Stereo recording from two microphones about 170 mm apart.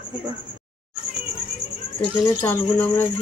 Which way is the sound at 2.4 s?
10° left (ahead or behind).